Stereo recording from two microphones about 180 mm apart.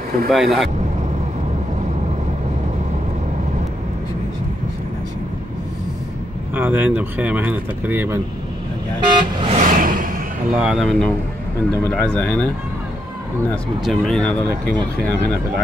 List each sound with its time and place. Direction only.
0.3 s speech: centre (ahead or behind)
6.5 s speech: 10° right (ahead or behind)
9.1 s vehicle: 30° right (ahead or behind)
9.6 s a sound: 50° right (ahead or behind)
10.5 s speech: 5° right (ahead or behind)
13.8 s speech: 5° left (ahead or behind)